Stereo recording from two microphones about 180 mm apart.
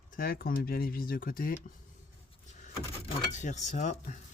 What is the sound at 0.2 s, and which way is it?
Speech, 55° left (ahead or behind).